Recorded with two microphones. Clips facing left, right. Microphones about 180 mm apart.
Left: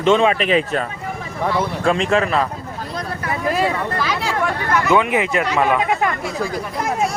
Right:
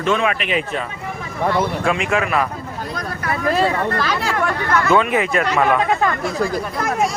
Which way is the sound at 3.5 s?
5° left (ahead or behind).